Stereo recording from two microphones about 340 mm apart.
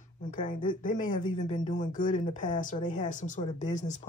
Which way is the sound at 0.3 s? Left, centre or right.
Left.